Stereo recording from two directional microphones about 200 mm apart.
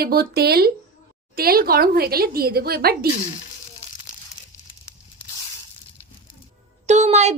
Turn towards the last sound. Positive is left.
turn(degrees=-35)  # may be behind; listen again after turning